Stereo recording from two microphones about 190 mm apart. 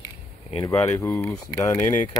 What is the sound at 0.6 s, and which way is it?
Speech, 15° left (ahead or behind).